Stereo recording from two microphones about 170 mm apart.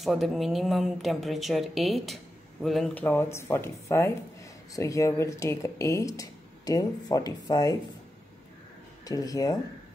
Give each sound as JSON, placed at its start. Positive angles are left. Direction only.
{"t": 0.0, "sound": "a woman's voice", "side_deg": 0}
{"t": 9.0, "sound": "speech", "side_deg": 20}